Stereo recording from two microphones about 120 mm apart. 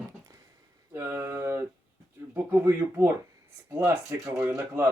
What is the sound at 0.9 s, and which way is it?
Speech, 20° right (ahead or behind).